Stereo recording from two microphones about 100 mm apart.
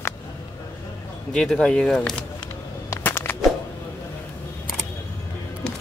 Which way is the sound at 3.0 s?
20° left (ahead or behind).